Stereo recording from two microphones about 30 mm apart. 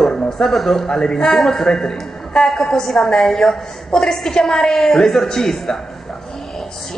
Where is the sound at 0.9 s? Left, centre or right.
Left.